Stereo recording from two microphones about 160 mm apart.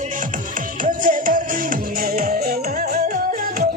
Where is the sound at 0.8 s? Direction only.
55° right (ahead or behind).